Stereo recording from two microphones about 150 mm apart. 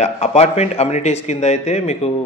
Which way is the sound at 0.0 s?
50° left (ahead or behind).